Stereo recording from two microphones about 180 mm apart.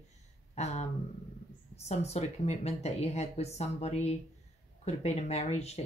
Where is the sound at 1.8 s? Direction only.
35° left (ahead or behind).